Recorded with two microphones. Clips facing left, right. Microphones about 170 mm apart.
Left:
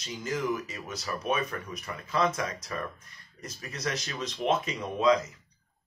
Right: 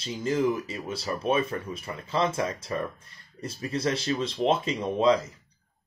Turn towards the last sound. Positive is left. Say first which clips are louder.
# right 2 dB
turn(degrees=-30)  # may be behind; listen again after turning